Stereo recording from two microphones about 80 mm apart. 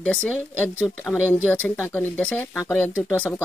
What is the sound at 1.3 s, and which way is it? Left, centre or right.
Speech, left.